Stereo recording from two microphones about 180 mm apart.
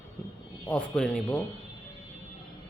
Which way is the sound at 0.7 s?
5° left (ahead or behind).